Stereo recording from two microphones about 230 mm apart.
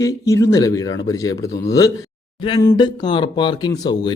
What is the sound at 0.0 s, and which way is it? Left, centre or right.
Speech, centre.